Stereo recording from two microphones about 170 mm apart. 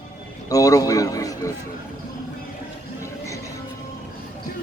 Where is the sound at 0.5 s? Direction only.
20° left (ahead or behind).